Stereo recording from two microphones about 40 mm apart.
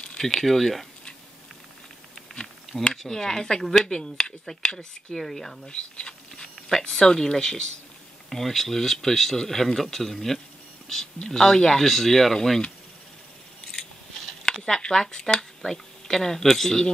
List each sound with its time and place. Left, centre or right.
0.2 s speech: centre
3.0 s speech: centre
5.7 s a sound: left
6.8 s speech: centre
8.3 s speech: centre
14.7 s speech: centre